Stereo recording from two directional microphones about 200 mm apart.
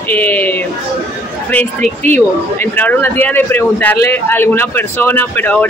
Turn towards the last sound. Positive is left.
turn(degrees=10)  # may be behind; listen again after turning